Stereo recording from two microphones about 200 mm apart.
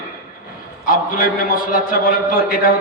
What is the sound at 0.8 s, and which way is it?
A man's voice, 45° left (ahead or behind).